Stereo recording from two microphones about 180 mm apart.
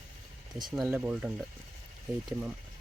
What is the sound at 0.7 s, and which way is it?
Speech, centre (ahead or behind).